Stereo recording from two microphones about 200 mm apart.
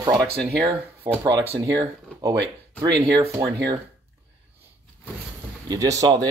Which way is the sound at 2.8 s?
15° right (ahead or behind).